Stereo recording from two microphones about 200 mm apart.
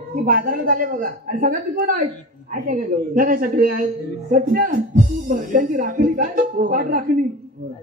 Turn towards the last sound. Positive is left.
turn(degrees=-45)  # may be behind; listen again after turning